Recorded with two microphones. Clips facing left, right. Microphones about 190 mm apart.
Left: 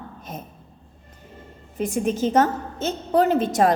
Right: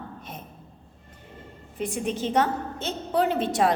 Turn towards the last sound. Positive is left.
turn(degrees=45)  # may be behind; listen again after turning